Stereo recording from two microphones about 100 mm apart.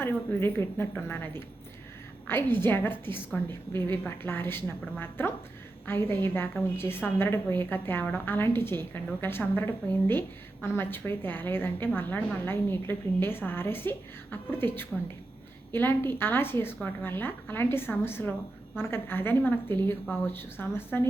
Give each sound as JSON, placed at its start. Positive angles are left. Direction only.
{"t": 0.0, "sound": "a woman's voice", "side_deg": 20}